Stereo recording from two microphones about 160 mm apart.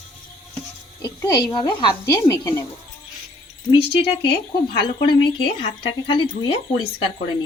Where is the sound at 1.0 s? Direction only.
25° left (ahead or behind).